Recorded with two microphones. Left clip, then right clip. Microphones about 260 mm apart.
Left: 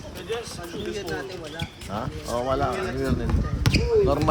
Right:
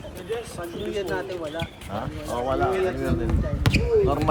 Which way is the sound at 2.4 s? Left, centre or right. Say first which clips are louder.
Right 1 dB; left.